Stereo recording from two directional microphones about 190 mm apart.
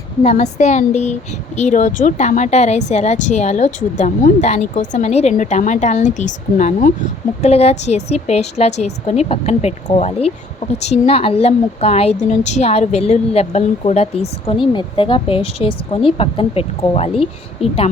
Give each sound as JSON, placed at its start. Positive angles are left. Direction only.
{"t": 0.2, "sound": "a woman's voice", "side_deg": 35}